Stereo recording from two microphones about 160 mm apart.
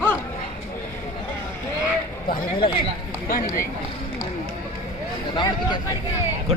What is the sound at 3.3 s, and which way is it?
Speech, 60° left (ahead or behind).